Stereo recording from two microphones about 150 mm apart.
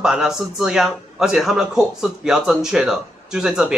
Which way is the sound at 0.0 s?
5° right (ahead or behind).